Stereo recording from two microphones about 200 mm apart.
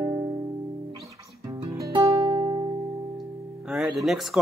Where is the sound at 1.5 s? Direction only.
20° right (ahead or behind).